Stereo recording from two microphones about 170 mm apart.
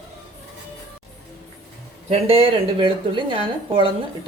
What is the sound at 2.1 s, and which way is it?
Speech, 35° right (ahead or behind).